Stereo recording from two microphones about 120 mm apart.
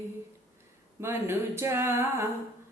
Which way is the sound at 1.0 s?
20° right (ahead or behind).